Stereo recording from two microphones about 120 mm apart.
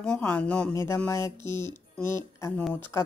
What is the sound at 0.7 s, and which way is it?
A woman's voice, 20° left (ahead or behind).